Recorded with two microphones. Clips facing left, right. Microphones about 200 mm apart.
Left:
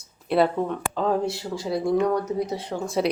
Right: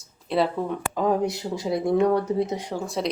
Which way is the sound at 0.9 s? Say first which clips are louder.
Right 1 dB; 15° right (ahead or behind).